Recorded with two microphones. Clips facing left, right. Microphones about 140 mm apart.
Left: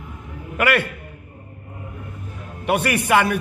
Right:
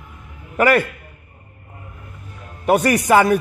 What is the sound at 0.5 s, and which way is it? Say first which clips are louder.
Speech: right 4 dB; 40° right (ahead or behind).